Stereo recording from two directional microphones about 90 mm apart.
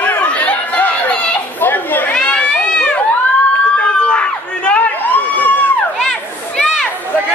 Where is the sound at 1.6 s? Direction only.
20° left (ahead or behind).